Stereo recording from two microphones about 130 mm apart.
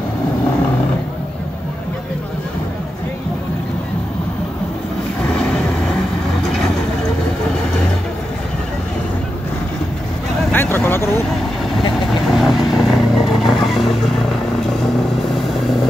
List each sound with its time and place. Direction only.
5.2 s vehicle: 5° left (ahead or behind)
10.5 s vehicle: 15° left (ahead or behind)
12.1 s vehicle: centre (ahead or behind)